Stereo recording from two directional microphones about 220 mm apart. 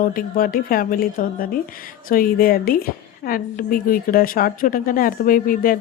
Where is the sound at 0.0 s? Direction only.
40° left (ahead or behind).